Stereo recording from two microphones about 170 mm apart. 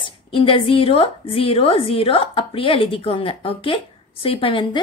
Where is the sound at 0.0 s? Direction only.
30° left (ahead or behind).